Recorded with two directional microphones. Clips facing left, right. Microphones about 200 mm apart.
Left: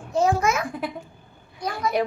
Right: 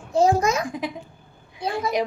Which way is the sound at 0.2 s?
35° right (ahead or behind).